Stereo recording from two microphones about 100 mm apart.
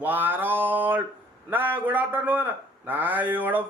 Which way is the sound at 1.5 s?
20° right (ahead or behind).